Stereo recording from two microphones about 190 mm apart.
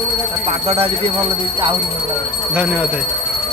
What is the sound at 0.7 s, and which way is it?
Speech, 30° right (ahead or behind).